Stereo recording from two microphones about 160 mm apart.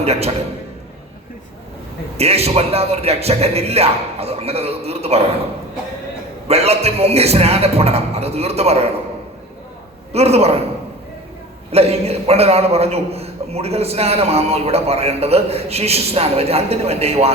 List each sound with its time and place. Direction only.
0.0 s a man's voice: 40° right (ahead or behind)
2.1 s a man's voice: 40° right (ahead or behind)
6.5 s a man's voice: 40° right (ahead or behind)
10.1 s a man's voice: 40° right (ahead or behind)
11.7 s a man's voice: 40° right (ahead or behind)